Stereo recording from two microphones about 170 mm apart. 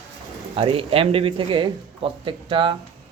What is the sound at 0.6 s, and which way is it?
Speech, 35° right (ahead or behind).